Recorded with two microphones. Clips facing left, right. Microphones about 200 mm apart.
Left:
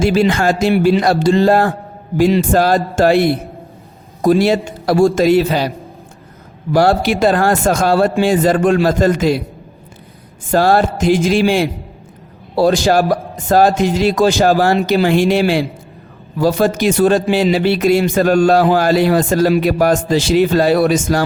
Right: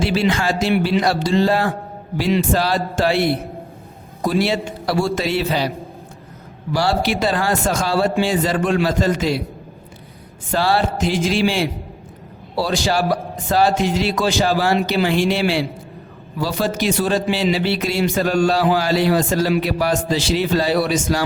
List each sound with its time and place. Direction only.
0.0 s a man's voice: 50° left (ahead or behind)
4.2 s a man's voice: 45° left (ahead or behind)
6.7 s a man's voice: 50° left (ahead or behind)
10.5 s a man's voice: 50° left (ahead or behind)